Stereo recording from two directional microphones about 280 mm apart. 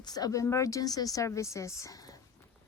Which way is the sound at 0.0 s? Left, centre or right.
Centre.